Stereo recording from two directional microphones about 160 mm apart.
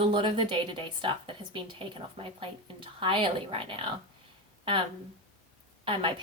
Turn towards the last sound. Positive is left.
turn(degrees=-35)  # may be behind; listen again after turning